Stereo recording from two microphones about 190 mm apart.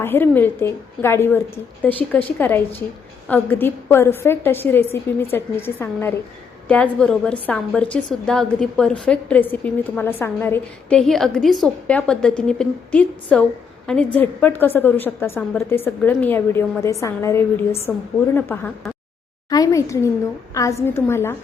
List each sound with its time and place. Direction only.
0.0 s a woman's voice: 10° left (ahead or behind)
19.5 s a woman's voice: 20° left (ahead or behind)